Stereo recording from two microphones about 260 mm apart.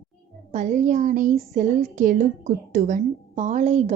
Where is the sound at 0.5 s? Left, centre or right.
Right.